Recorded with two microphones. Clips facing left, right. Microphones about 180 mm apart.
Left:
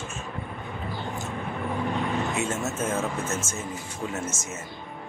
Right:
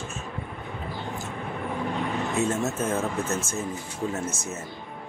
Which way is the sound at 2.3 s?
35° right (ahead or behind).